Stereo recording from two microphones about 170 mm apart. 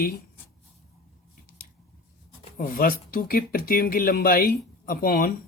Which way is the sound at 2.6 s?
60° left (ahead or behind).